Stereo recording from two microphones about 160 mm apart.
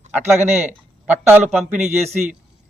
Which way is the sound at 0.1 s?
15° right (ahead or behind).